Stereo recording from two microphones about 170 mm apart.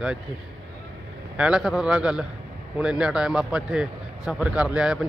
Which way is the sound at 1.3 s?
5° right (ahead or behind).